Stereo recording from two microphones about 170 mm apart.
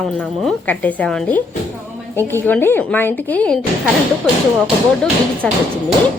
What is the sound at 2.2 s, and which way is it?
Speech, 15° right (ahead or behind).